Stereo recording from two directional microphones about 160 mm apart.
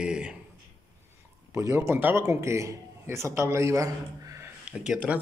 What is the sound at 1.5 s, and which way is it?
Speech, 20° right (ahead or behind).